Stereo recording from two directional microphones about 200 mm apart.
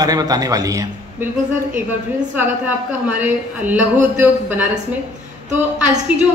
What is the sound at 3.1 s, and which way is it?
A man's voice, 10° right (ahead or behind).